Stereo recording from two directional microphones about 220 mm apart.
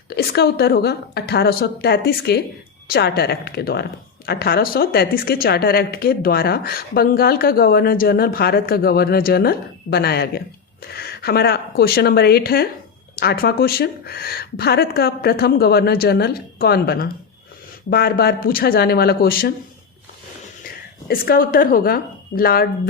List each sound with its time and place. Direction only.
0.1 s a woman's voice: 45° left (ahead or behind)
21.1 s a woman's voice: 40° left (ahead or behind)